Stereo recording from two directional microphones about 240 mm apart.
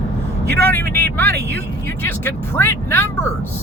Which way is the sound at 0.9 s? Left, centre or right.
Centre.